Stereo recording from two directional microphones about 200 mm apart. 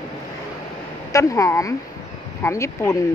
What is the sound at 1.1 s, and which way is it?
A woman's voice, 15° left (ahead or behind).